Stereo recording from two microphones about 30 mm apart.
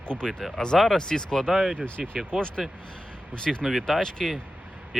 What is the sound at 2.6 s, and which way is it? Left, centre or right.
Speech, centre.